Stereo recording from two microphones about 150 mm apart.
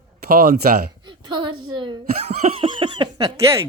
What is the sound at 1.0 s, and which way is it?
Speech, 30° right (ahead or behind).